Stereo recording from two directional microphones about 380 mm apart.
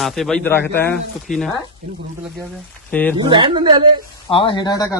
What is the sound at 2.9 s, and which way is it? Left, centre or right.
Speech, centre.